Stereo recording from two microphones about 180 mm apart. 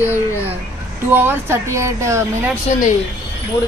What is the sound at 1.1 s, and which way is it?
Speech, 15° right (ahead or behind).